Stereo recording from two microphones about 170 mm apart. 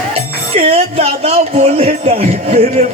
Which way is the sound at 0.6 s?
35° right (ahead or behind).